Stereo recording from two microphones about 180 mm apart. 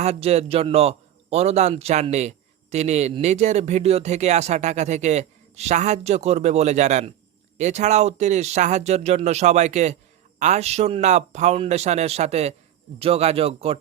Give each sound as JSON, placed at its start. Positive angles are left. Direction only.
{"t": 0.0, "sound": "a man's voice", "side_deg": -35}